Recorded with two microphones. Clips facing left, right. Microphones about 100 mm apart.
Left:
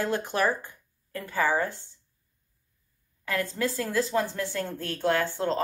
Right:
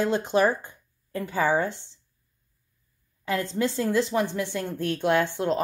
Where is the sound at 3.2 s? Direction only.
25° right (ahead or behind).